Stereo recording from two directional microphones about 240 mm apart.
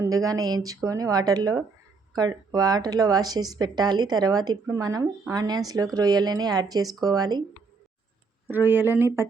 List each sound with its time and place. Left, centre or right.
0.0 s speech: centre
8.4 s speech: centre